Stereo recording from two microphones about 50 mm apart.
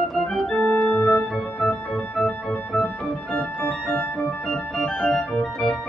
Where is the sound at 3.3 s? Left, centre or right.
Left.